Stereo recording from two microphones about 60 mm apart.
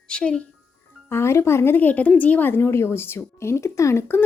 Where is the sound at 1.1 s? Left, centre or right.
Left.